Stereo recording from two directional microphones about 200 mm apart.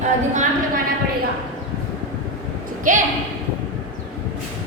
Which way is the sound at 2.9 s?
40° right (ahead or behind).